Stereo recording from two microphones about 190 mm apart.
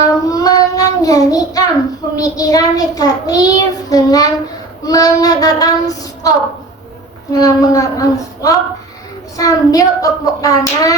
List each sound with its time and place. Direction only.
0.0 s child singing: 20° left (ahead or behind)
7.3 s speech: 20° left (ahead or behind)
9.4 s child singing: 20° left (ahead or behind)